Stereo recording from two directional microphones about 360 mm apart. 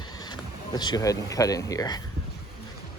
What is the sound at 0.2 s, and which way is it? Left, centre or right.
Speech, centre.